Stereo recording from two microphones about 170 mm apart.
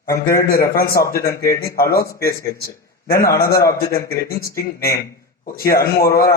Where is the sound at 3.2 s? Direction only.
60° left (ahead or behind).